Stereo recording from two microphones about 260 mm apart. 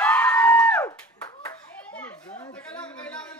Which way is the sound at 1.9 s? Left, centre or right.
Centre.